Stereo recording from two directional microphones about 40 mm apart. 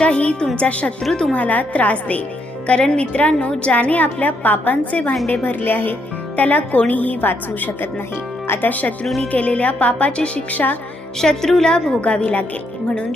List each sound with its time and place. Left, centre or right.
0.0 s a woman's voice: left
2.6 s a woman's voice: left
8.6 s a woman's voice: left
9.0 s a woman's voice: centre
9.3 s a woman's voice: left
10.5 s a woman's voice: left
11.2 s a woman's voice: centre
11.9 s a woman's voice: left